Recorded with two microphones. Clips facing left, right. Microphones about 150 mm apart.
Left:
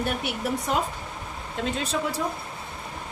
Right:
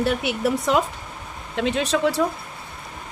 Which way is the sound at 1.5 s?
75° right (ahead or behind).